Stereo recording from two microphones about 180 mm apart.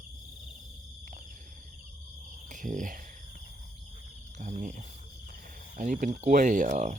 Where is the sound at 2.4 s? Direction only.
45° right (ahead or behind).